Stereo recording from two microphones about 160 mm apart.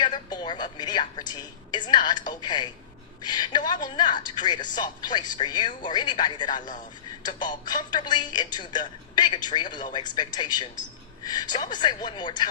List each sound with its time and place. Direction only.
0.0 s a woman's voice: 30° left (ahead or behind)